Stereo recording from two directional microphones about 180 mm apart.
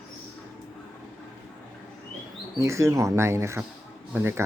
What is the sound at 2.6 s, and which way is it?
Speech, 15° right (ahead or behind).